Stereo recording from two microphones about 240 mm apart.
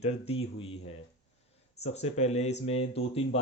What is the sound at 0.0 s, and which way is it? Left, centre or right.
Speech, left.